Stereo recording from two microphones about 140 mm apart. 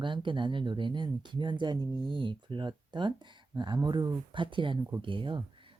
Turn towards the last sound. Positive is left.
turn(degrees=-35)  # may be behind; listen again after turning